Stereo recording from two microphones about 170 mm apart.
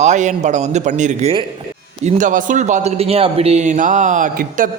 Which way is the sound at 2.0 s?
45° right (ahead or behind).